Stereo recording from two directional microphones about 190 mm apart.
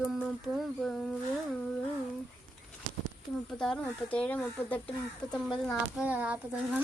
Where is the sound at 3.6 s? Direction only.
5° left (ahead or behind).